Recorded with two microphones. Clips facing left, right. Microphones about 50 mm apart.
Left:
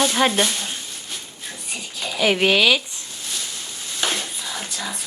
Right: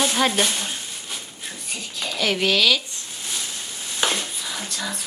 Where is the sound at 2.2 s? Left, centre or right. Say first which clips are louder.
Left 3 dB; centre.